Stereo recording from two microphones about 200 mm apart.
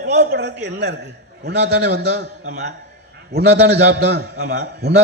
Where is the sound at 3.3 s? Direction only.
55° right (ahead or behind).